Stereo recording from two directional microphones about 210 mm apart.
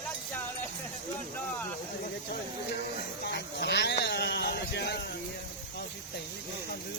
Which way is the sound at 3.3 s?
50° left (ahead or behind).